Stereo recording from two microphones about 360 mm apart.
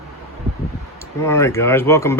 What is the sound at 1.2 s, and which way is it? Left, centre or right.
Speech, centre.